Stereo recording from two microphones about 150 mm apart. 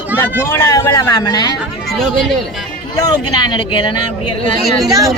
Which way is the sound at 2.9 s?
25° left (ahead or behind).